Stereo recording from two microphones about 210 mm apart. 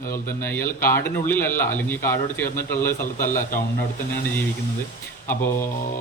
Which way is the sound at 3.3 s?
40° left (ahead or behind).